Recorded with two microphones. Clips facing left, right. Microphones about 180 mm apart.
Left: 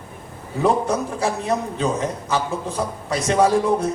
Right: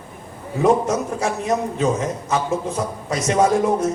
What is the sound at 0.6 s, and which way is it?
A man's voice, 35° left (ahead or behind).